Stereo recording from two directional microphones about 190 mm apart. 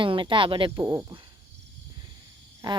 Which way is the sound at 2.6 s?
25° right (ahead or behind).